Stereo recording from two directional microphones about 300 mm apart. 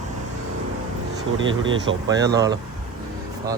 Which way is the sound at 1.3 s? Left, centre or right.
Right.